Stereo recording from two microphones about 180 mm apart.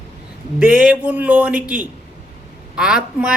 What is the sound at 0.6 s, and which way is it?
Speech, 5° right (ahead or behind).